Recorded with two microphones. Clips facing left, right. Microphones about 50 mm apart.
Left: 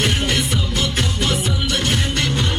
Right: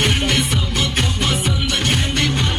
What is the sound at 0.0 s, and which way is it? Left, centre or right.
Music, right.